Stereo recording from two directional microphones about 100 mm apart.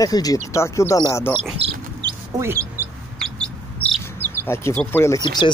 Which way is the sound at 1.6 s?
80° right.